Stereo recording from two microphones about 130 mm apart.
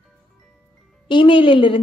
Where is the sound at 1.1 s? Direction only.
40° left (ahead or behind).